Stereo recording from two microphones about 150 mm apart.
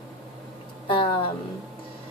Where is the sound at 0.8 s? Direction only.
35° left (ahead or behind).